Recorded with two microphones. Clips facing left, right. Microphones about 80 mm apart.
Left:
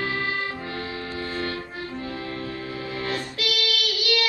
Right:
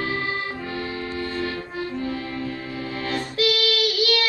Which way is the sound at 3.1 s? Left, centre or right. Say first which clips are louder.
Right 8 dB; right.